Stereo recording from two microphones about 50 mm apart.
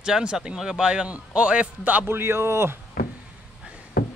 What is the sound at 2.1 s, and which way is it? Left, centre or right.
Speech, right.